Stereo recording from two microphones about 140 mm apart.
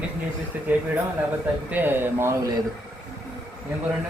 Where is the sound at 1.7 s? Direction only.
15° right (ahead or behind).